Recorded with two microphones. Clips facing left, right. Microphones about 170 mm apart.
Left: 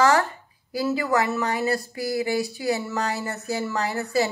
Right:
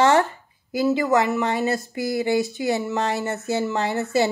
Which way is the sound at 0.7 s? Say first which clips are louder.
Right 4 dB; 20° right (ahead or behind).